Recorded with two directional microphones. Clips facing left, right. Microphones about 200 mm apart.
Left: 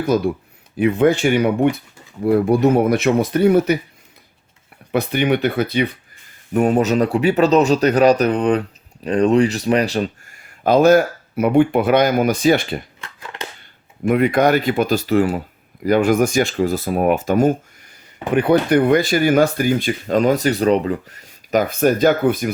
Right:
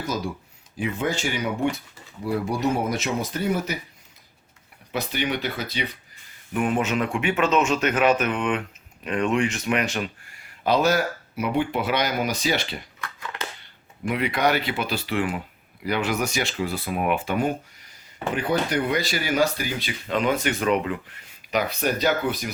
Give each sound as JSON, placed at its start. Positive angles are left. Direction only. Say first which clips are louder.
{"t": 0.0, "sound": "speech", "louder": "left 11 dB", "side_deg": 60}
{"t": 4.9, "sound": "speech", "louder": "left 9 dB", "side_deg": 55}
{"t": 6.5, "sound": "speech", "louder": "left 8 dB", "side_deg": 40}
{"t": 10.6, "sound": "speech", "louder": "left 9 dB", "side_deg": 50}
{"t": 14.1, "sound": "speech", "louder": "left 8 dB", "side_deg": 50}
{"t": 18.3, "sound": "speech", "louder": "left 10 dB", "side_deg": 60}